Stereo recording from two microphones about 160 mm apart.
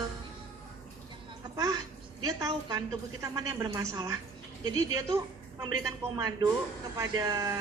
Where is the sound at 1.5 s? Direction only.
25° right (ahead or behind).